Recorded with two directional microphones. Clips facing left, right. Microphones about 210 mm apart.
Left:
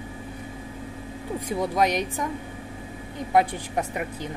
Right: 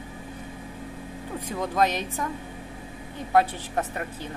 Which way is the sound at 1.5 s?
10° left (ahead or behind).